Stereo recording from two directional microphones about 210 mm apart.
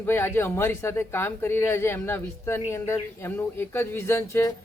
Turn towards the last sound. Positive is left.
turn(degrees=15)  # may be behind; listen again after turning